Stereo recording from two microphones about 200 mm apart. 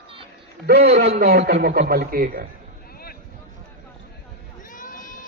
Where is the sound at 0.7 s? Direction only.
50° right (ahead or behind).